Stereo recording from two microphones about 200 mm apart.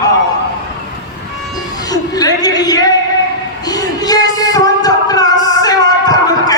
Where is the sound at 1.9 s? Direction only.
20° left (ahead or behind).